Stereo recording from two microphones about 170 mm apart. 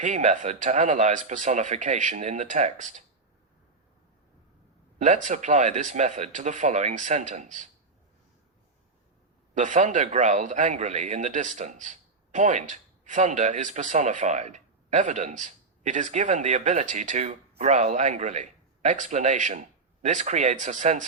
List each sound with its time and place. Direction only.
0.0 s a man's voice: 45° right (ahead or behind)
4.9 s a man's voice: 45° right (ahead or behind)
9.6 s a man's voice: 45° right (ahead or behind)